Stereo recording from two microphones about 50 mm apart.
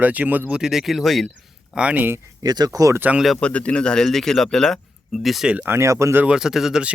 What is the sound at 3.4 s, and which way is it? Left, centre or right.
Speech, left.